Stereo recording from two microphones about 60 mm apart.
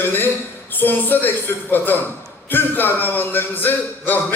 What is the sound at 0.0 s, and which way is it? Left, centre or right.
A man's voice, left.